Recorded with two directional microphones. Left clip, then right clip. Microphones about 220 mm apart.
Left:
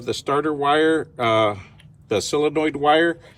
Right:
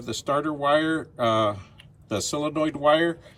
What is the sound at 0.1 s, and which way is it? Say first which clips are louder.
Speech: left 4 dB; 15° right (ahead or behind).